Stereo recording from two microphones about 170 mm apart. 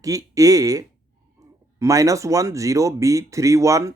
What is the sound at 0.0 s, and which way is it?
Speech, 20° right (ahead or behind).